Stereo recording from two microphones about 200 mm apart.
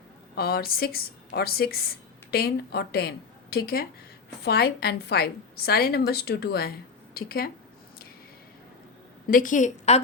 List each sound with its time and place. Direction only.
0.3 s a woman's voice: 50° left (ahead or behind)
9.2 s a woman's voice: 45° left (ahead or behind)